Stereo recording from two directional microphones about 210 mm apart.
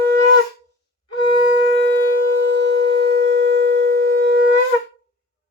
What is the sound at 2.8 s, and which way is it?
Sine wave, 50° right (ahead or behind).